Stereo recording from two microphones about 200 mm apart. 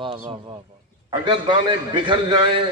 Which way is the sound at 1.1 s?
25° right (ahead or behind).